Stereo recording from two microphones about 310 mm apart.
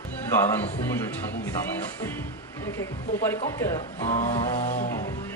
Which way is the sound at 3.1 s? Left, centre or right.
Centre.